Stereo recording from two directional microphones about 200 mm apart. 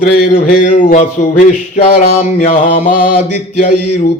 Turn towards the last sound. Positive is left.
turn(degrees=35)  # may be behind; listen again after turning